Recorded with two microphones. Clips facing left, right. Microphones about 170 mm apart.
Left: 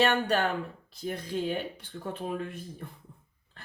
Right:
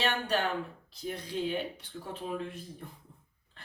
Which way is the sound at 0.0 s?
50° left (ahead or behind).